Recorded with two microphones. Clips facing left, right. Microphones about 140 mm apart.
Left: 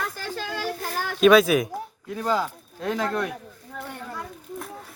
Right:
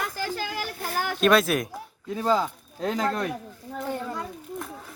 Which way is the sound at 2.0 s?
30° right (ahead or behind).